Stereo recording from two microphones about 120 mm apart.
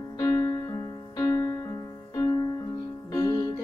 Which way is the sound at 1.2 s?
30° left (ahead or behind).